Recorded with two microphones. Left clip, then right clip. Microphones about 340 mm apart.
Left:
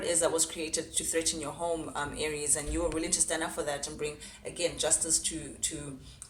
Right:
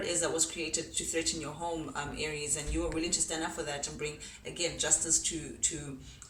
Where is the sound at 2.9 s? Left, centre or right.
Centre.